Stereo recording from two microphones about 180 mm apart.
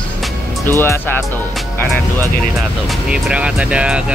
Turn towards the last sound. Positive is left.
turn(degrees=-5)  # may be behind; listen again after turning